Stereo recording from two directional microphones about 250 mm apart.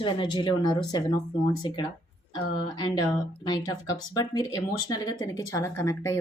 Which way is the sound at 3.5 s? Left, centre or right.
Centre.